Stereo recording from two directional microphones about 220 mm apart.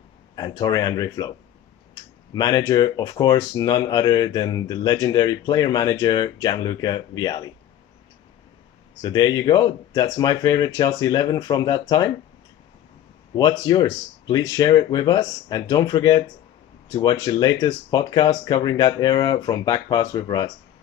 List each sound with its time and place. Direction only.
0.4 s speech: 15° left (ahead or behind)
2.3 s speech: 15° left (ahead or behind)
9.0 s speech: 20° left (ahead or behind)
13.3 s speech: 20° left (ahead or behind)